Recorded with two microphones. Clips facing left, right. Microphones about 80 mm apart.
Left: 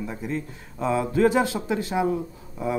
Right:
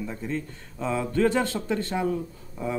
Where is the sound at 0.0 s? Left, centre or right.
Centre.